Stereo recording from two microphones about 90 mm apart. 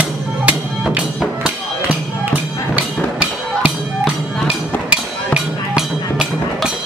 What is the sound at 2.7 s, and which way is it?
Music, 15° right (ahead or behind).